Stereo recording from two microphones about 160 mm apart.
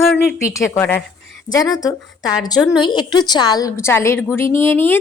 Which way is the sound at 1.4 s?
25° left (ahead or behind).